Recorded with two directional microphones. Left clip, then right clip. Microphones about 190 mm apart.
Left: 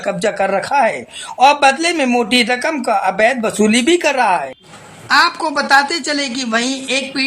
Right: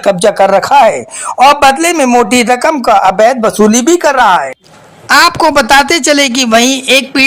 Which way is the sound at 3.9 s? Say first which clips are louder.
Right 6 dB; centre (ahead or behind).